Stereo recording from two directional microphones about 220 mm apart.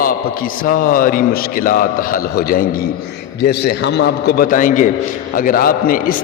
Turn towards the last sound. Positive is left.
turn(degrees=40)  # may be behind; listen again after turning